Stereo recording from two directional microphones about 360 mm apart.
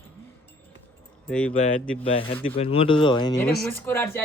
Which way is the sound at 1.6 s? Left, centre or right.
Centre.